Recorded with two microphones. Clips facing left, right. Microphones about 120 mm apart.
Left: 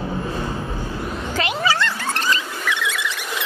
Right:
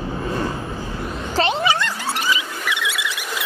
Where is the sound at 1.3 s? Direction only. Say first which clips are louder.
Right 3 dB; 30° right (ahead or behind).